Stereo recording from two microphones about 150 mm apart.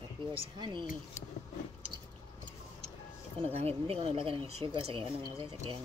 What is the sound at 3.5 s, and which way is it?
Speech, 40° right (ahead or behind).